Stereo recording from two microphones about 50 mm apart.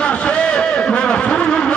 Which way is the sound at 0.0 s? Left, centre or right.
Centre.